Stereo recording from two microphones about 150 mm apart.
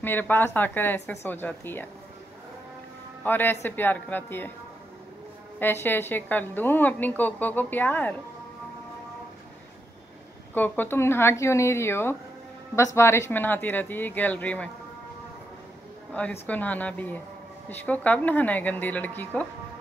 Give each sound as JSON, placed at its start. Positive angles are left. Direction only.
{"t": 0.0, "sound": "a woman's voice", "side_deg": 15}
{"t": 3.3, "sound": "a woman's voice", "side_deg": 15}
{"t": 5.6, "sound": "a woman's voice", "side_deg": 15}
{"t": 10.5, "sound": "a woman's voice", "side_deg": 10}
{"t": 16.1, "sound": "a woman's voice", "side_deg": 10}